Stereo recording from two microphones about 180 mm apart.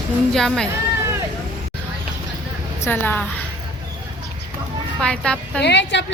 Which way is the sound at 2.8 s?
10° left (ahead or behind).